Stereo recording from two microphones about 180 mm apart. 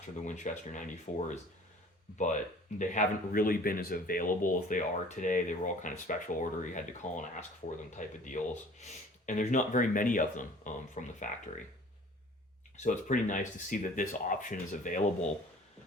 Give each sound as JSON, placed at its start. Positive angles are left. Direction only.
{"t": 0.3, "sound": "speech", "side_deg": 45}
{"t": 12.7, "sound": "speech", "side_deg": 45}